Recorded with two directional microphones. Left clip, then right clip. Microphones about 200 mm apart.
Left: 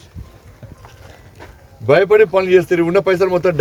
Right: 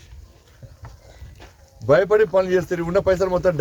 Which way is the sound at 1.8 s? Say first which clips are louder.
Left 5 dB; 20° left (ahead or behind).